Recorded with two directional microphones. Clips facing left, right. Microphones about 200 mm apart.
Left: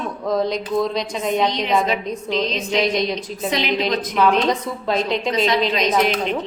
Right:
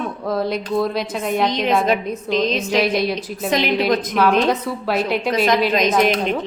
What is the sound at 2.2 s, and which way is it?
Speech, 50° right (ahead or behind).